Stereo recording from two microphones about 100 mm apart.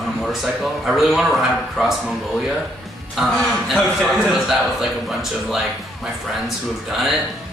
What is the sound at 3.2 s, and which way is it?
Speech, 5° right (ahead or behind).